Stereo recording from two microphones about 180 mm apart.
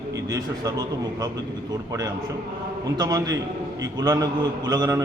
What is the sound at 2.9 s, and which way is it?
A man's voice, 20° right (ahead or behind).